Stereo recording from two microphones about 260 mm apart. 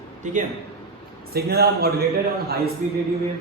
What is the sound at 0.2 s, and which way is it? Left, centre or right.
A man's voice, right.